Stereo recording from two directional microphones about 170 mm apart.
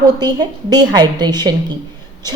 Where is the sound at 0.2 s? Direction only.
25° right (ahead or behind).